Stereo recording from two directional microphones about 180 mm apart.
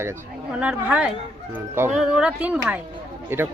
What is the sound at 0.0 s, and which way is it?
Speech, 10° right (ahead or behind).